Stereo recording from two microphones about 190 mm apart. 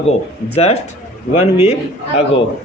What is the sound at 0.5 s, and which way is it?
Speech, 35° left (ahead or behind).